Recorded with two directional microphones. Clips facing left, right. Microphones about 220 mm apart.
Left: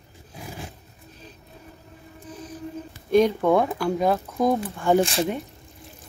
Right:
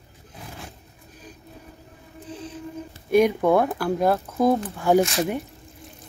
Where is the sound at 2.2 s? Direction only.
30° right (ahead or behind).